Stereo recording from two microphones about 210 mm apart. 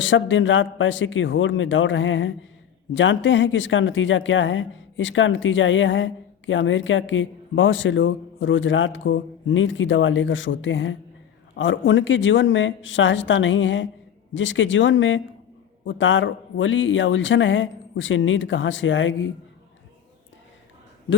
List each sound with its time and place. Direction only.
0.0 s speech: 65° left (ahead or behind)